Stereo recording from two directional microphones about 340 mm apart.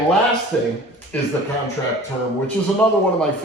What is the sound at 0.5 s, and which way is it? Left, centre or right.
Speech, centre.